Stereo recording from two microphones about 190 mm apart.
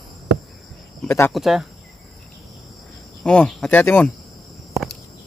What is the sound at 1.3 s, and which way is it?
Speech, centre (ahead or behind).